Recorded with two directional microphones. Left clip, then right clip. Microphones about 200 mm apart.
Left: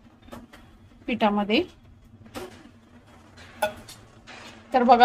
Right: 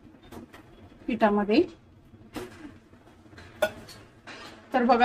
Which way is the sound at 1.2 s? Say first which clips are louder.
Even; 10° left (ahead or behind).